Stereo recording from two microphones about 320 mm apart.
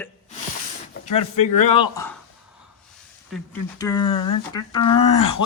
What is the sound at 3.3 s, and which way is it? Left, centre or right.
Speech, centre.